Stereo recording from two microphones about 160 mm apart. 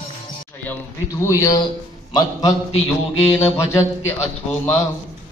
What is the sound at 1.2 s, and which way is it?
Speech, 20° left (ahead or behind).